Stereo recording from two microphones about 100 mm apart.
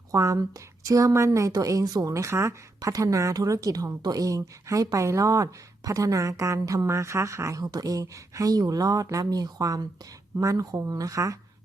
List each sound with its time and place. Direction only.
0.1 s a woman's voice: 30° right (ahead or behind)